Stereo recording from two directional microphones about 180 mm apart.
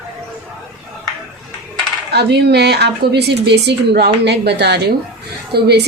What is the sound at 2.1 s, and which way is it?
A woman's voice, 65° right (ahead or behind).